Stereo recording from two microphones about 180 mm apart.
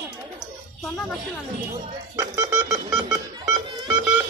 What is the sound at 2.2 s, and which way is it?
Speech, 15° right (ahead or behind).